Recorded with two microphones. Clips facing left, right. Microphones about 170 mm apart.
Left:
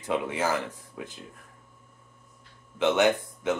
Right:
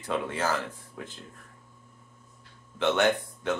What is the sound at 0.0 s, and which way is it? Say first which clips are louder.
Speech: left 2 dB; 15° left (ahead or behind).